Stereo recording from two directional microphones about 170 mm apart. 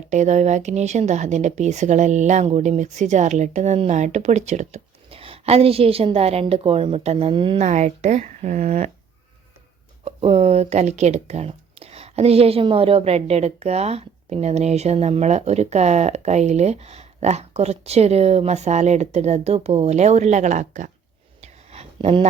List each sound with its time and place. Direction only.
0.1 s a woman's voice: 45° right (ahead or behind)
7.6 s a woman's voice: 45° right (ahead or behind)
10.0 s speech: 35° right (ahead or behind)
21.4 s a sound: 40° right (ahead or behind)